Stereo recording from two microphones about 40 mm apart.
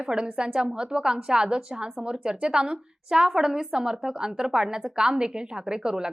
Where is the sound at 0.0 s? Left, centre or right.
Centre.